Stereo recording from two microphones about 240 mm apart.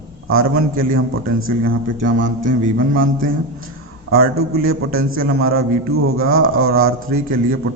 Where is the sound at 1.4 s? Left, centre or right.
Right.